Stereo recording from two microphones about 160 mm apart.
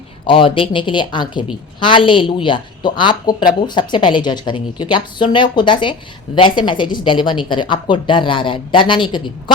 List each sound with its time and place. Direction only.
0.3 s a woman's voice: 35° left (ahead or behind)